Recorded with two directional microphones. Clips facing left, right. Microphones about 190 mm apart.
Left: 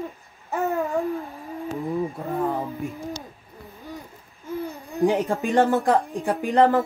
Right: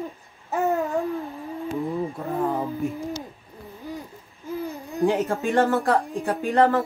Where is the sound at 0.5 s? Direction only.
Centre (ahead or behind).